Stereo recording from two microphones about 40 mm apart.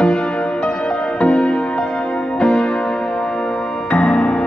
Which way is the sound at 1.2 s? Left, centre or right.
Left.